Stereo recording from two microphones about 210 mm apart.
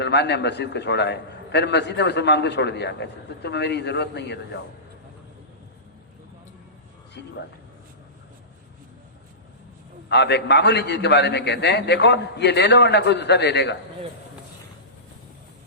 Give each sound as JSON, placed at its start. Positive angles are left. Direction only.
{"t": 0.0, "sound": "a man's voice", "side_deg": 55}
{"t": 7.1, "sound": "speech", "side_deg": 55}
{"t": 10.1, "sound": "a man's voice", "side_deg": 55}